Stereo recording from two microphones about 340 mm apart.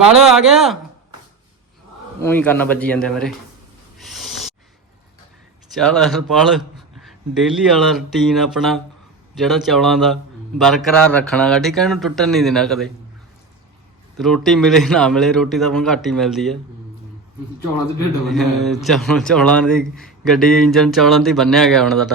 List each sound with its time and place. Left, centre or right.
0.1 s speech: centre
2.2 s speech: centre
3.9 s a sound: centre
5.7 s speech: centre
14.2 s speech: centre
18.3 s speech: centre